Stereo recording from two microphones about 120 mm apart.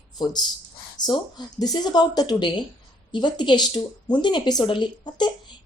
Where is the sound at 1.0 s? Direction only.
35° left (ahead or behind).